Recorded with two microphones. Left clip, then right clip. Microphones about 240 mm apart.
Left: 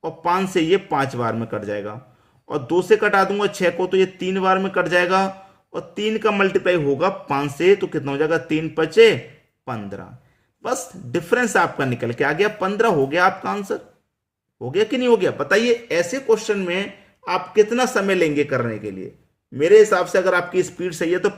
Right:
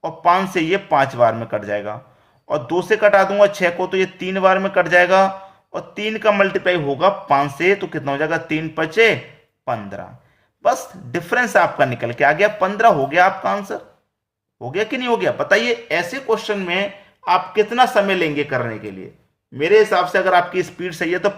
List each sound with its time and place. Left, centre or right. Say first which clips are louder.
0.0 s speech: right 5 dB; centre